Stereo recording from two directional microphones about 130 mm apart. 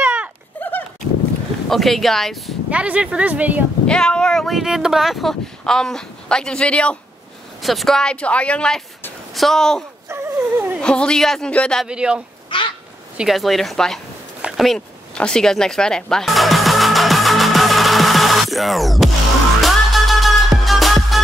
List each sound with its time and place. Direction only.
0.0 s horse: 10° right (ahead or behind)
0.6 s horse: 15° left (ahead or behind)
1.7 s speech: centre (ahead or behind)
3.8 s speech: 5° left (ahead or behind)
10.0 s wail: 15° right (ahead or behind)
10.8 s speech: 5° left (ahead or behind)
11.9 s speech: 5° right (ahead or behind)
12.4 s bird: 40° left (ahead or behind)
13.2 s speech: centre (ahead or behind)
14.4 s a sound: centre (ahead or behind)
19.6 s music: centre (ahead or behind)